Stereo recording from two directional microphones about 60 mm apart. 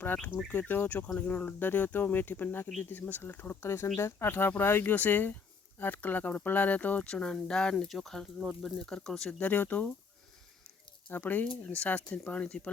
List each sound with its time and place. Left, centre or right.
0.4 s speech: left
7.1 s speech: centre
9.4 s speech: left
11.1 s speech: left